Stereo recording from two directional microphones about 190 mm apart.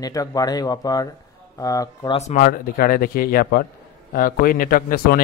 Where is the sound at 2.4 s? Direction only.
50° left (ahead or behind).